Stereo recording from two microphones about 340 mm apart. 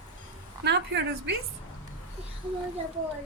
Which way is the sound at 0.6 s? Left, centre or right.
Right.